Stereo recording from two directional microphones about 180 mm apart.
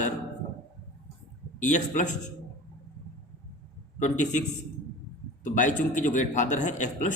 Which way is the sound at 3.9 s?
45° left (ahead or behind).